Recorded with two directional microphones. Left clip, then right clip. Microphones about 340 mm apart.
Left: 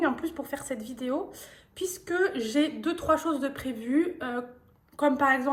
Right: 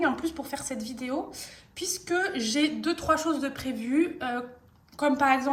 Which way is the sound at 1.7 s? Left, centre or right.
Left.